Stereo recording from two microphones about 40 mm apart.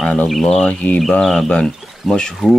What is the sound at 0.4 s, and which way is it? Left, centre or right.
Speech, centre.